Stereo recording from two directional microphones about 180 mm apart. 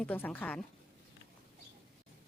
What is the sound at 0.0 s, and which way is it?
Speech, 10° left (ahead or behind).